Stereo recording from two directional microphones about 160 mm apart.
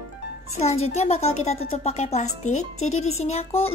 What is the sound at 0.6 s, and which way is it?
Speech, 40° left (ahead or behind).